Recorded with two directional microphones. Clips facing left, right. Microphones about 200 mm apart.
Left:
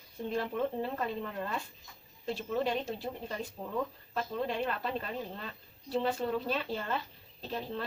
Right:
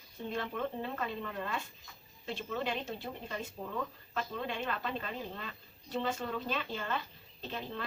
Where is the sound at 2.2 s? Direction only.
35° left (ahead or behind).